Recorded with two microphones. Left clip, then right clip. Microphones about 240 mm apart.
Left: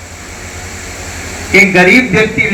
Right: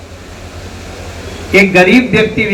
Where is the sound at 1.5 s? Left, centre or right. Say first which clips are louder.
Left 1 dB; right.